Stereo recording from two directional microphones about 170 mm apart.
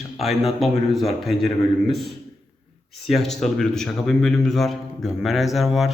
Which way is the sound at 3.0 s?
Centre (ahead or behind).